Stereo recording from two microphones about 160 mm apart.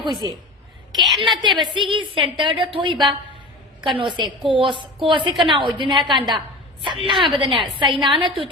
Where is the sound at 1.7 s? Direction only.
30° right (ahead or behind).